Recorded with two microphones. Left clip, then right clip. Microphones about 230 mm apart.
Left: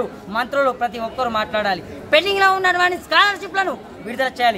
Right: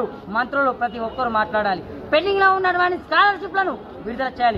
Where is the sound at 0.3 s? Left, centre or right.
Left.